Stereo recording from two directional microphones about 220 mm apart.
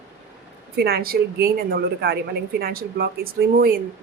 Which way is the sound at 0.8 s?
45° right (ahead or behind).